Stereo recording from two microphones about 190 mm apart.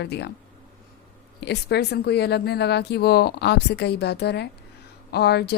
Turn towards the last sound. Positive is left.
turn(degrees=60)  # may be behind; listen again after turning